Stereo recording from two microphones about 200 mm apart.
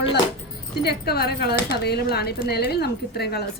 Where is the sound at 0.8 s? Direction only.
55° left (ahead or behind).